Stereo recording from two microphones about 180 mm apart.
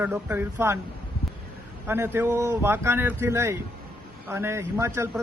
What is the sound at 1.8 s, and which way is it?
Speech, 10° right (ahead or behind).